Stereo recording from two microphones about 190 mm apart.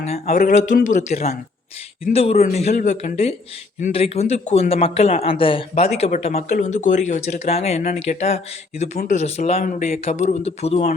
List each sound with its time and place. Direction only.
0.3 s speech: 45° left (ahead or behind)